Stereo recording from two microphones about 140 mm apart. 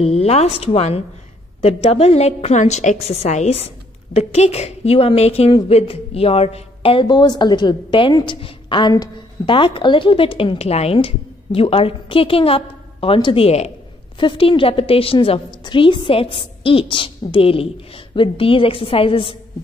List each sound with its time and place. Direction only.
0.0 s a woman's voice: 45° left (ahead or behind)